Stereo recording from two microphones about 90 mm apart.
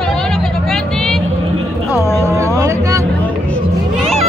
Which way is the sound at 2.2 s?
30° right (ahead or behind).